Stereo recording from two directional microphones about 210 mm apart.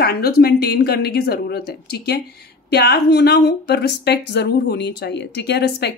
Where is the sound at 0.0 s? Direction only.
45° left (ahead or behind).